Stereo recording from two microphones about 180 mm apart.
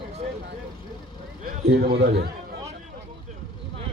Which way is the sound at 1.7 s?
65° right (ahead or behind).